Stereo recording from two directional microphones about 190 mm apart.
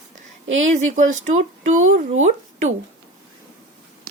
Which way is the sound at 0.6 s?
40° right (ahead or behind).